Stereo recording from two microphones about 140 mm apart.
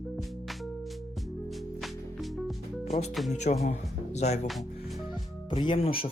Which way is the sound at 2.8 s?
55° left (ahead or behind).